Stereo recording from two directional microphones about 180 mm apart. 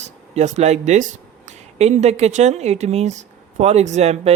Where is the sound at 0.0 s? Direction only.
40° right (ahead or behind).